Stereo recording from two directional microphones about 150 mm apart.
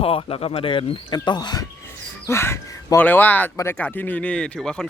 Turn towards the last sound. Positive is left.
turn(degrees=5)  # may be behind; listen again after turning